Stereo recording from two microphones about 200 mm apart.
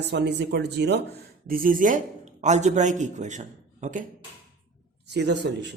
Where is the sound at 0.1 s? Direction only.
60° right (ahead or behind).